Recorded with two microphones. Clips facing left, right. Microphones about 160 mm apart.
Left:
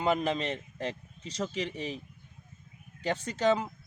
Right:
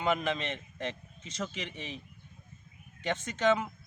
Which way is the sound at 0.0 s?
35° left (ahead or behind).